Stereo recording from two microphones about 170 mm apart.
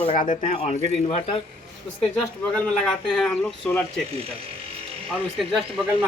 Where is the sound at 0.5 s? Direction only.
40° left (ahead or behind).